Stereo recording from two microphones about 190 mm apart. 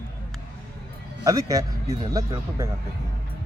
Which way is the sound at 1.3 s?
20° right (ahead or behind).